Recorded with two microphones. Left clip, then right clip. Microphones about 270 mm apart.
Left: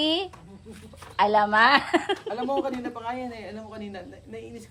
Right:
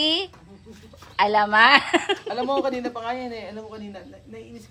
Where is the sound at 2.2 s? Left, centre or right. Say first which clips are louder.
Right 4 dB; right.